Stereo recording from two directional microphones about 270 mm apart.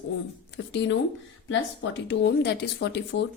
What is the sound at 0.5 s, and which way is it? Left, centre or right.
A woman's voice, left.